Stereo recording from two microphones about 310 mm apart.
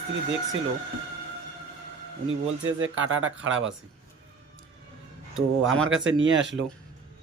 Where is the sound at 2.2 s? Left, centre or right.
Right.